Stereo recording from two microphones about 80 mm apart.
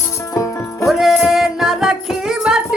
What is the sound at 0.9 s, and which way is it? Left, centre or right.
Music, centre.